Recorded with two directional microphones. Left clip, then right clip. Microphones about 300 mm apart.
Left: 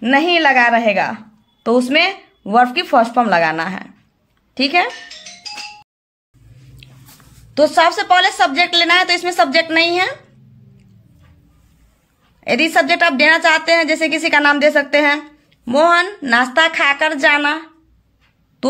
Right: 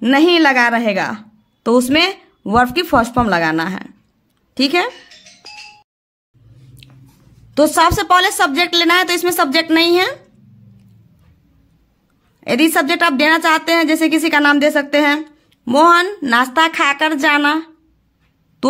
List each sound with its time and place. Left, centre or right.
0.0 s a woman's voice: centre
6.8 s a sound: centre
7.5 s a woman's voice: centre
12.4 s a woman's voice: centre